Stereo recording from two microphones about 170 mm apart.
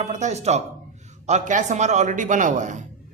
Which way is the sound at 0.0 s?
40° right (ahead or behind).